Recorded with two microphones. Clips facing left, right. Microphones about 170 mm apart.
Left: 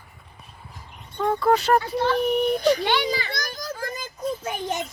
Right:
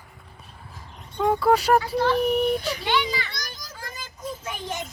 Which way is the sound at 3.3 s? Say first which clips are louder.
Left 8 dB; 50° left (ahead or behind).